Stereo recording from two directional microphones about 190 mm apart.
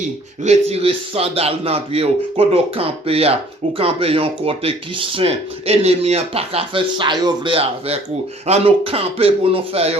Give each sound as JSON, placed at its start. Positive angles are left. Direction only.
{"t": 0.4, "sound": "a man's voice", "side_deg": -35}